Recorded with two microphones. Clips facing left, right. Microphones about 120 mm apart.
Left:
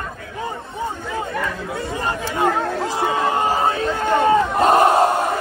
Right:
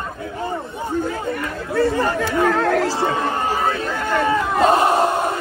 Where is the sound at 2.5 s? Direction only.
90° right.